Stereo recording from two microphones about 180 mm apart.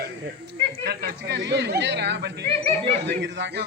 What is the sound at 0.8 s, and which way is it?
Speech, 65° right (ahead or behind).